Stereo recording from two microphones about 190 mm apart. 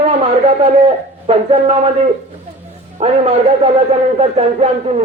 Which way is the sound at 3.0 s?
30° right (ahead or behind).